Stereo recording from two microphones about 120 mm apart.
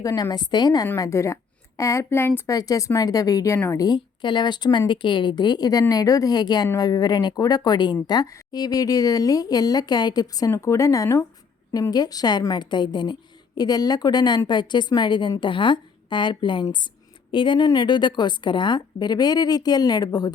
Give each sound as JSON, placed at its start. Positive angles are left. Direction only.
{"t": 0.0, "sound": "a woman's voice", "side_deg": 30}
{"t": 2.5, "sound": "speech", "side_deg": 30}